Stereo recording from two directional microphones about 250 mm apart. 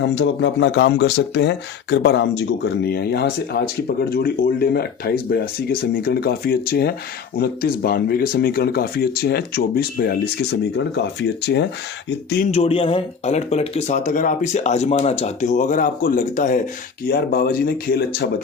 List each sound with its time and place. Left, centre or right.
0.0 s speech: left
12.5 s speech: left